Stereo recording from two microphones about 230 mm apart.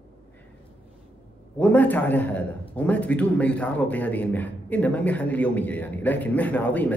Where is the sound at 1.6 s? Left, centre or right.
Centre.